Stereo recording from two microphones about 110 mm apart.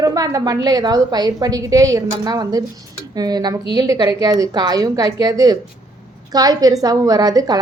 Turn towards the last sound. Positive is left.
turn(degrees=-35)  # may be behind; listen again after turning